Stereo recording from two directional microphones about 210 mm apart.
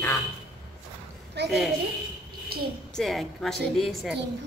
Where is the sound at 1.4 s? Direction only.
55° right (ahead or behind).